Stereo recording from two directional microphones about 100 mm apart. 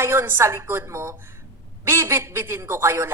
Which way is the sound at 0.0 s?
25° right (ahead or behind).